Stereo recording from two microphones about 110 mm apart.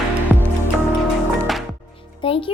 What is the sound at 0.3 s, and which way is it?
Music, 15° right (ahead or behind).